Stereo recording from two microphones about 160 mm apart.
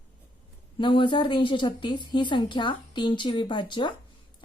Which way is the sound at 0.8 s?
30° left (ahead or behind).